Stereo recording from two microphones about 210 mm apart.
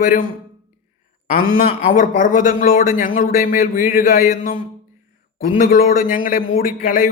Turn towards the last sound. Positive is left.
turn(degrees=40)  # may be behind; listen again after turning